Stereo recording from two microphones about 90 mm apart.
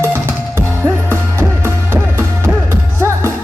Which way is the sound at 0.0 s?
25° right (ahead or behind).